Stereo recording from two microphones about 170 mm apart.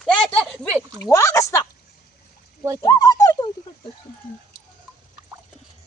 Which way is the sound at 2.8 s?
20° left (ahead or behind).